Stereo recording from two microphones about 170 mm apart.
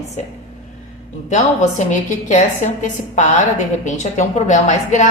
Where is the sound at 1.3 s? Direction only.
45° left (ahead or behind).